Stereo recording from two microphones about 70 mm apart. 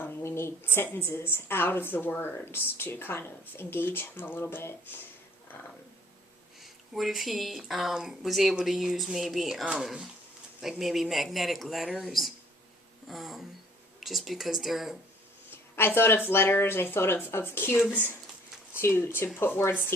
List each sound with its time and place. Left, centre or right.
0.0 s a woman's voice: left
5.5 s a sound: left
6.6 s speech: centre
15.4 s a woman's voice: left